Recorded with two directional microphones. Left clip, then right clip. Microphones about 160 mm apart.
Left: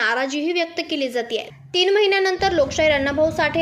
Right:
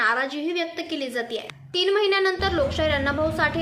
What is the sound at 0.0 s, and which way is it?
A woman's voice, 20° left (ahead or behind).